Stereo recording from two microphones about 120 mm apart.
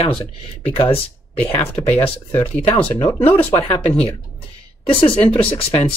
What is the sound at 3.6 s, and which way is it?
Speech, 55° left (ahead or behind).